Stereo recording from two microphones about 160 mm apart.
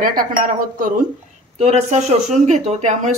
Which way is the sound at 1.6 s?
40° right (ahead or behind).